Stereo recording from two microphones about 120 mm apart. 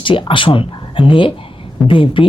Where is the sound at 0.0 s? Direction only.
45° left (ahead or behind).